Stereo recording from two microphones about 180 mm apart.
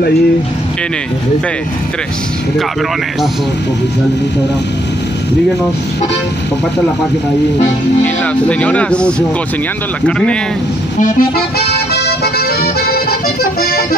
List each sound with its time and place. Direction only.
8.0 s speech: 5° left (ahead or behind)
11.0 s accordion: 45° left (ahead or behind)
11.6 s accordion: 65° left (ahead or behind)